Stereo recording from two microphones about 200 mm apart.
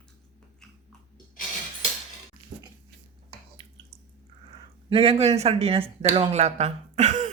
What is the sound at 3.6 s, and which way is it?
Drip, 25° right (ahead or behind).